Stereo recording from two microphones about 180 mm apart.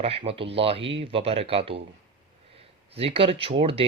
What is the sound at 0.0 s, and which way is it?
Speech, 35° right (ahead or behind).